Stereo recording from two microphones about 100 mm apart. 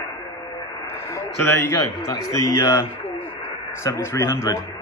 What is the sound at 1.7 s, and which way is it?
Speech, 40° left (ahead or behind).